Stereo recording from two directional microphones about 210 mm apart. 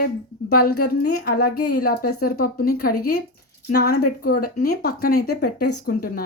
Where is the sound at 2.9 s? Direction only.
90° left.